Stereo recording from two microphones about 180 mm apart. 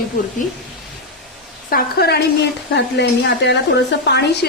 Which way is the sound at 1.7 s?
60° left (ahead or behind).